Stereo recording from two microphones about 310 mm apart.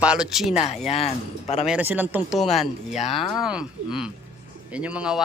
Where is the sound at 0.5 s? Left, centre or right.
Left.